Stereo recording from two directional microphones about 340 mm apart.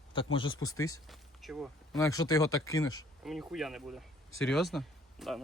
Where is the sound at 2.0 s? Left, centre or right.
Centre.